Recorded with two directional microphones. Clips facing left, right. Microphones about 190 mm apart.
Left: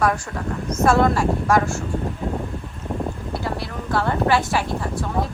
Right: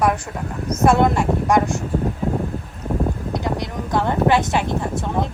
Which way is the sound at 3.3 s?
15° right (ahead or behind).